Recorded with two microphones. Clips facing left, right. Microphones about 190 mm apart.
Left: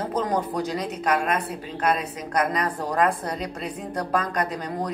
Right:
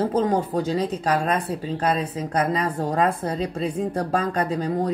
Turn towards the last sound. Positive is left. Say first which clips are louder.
# right 4 dB
turn(degrees=-30)  # may be behind; listen again after turning